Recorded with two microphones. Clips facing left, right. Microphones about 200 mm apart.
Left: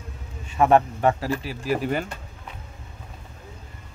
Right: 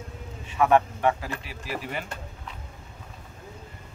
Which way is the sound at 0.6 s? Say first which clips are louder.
Left 3 dB; 35° left (ahead or behind).